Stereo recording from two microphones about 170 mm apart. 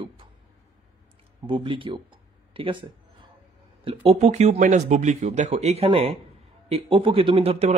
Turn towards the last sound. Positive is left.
turn(degrees=-35)  # may be behind; listen again after turning